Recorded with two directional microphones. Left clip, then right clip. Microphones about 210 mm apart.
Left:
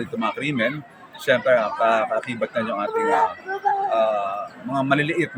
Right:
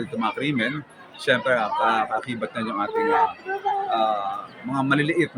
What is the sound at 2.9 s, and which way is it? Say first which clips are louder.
Speech: left 1 dB; 40° left (ahead or behind).